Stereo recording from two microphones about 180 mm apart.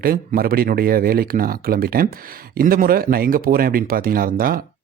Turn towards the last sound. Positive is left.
turn(degrees=-55)  # may be behind; listen again after turning